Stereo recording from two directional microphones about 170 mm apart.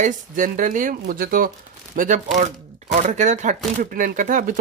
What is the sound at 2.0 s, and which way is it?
Speech, 45° right (ahead or behind).